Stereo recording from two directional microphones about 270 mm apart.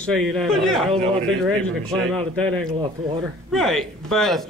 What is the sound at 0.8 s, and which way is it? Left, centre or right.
A man's voice, right.